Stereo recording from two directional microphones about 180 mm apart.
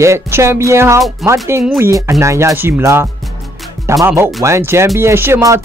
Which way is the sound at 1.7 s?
15° right (ahead or behind).